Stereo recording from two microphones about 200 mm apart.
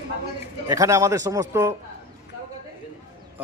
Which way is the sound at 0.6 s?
15° right (ahead or behind).